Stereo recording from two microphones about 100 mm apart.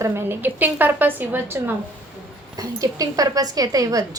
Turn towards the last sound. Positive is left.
turn(degrees=-35)  # may be behind; listen again after turning